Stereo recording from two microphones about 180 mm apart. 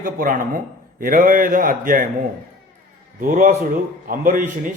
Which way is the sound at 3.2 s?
45° right (ahead or behind).